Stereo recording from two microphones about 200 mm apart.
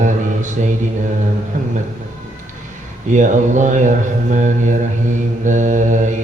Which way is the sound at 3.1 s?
40° right (ahead or behind).